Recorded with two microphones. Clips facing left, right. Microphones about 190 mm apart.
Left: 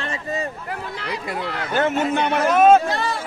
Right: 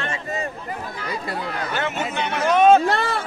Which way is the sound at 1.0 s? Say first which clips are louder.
Even; 75° left (ahead or behind).